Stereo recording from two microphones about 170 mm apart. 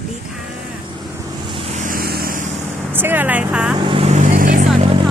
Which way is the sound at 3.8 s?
35° right (ahead or behind).